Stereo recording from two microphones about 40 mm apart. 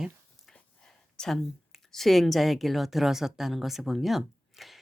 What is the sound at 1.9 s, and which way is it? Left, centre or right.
A woman's voice, centre.